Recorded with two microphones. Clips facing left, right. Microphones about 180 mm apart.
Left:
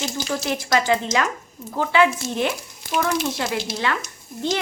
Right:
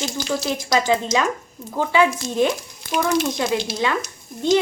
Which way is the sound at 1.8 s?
15° right (ahead or behind).